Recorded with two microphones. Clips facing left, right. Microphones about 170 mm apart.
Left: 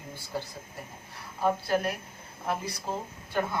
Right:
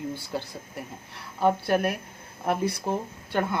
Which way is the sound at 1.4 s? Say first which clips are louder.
Right 4 dB; 60° right (ahead or behind).